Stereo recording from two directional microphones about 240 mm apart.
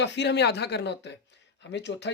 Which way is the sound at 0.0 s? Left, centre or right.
Left.